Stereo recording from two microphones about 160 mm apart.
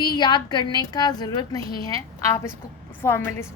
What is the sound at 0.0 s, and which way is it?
A woman's voice, 25° left (ahead or behind).